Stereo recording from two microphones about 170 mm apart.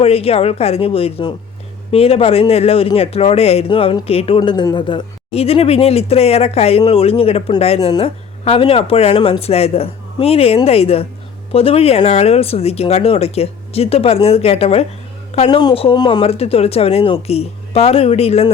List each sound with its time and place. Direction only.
0.0 s speech: 35° left (ahead or behind)
15.4 s speech: 25° left (ahead or behind)